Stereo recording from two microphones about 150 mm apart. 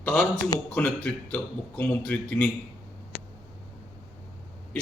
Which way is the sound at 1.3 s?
10° left (ahead or behind).